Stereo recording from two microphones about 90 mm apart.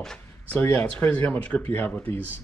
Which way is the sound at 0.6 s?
20° left (ahead or behind).